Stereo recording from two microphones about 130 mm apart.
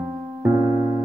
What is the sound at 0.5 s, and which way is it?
Keyboard, 35° right (ahead or behind).